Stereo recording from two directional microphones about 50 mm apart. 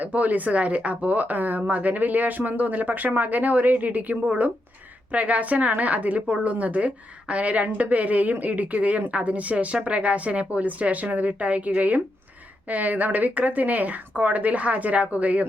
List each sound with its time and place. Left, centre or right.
0.0 s a woman's voice: right